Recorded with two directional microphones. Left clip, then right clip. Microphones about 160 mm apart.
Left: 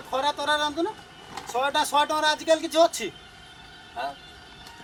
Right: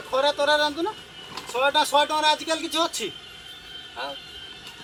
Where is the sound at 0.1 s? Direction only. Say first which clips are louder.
Right 4 dB; 15° left (ahead or behind).